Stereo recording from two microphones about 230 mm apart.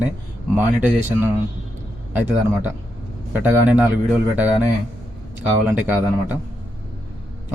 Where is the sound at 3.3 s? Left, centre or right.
Centre.